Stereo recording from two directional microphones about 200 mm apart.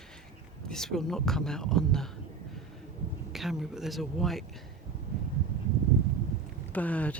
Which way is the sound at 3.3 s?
Centre (ahead or behind).